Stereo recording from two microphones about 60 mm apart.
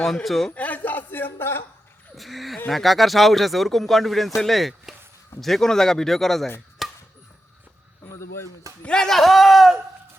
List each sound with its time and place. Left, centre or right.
0.0 s speech: centre
0.5 s speech: left
2.1 s speech: centre
6.8 s chopping: centre
8.1 s speech: left
8.8 s speech: centre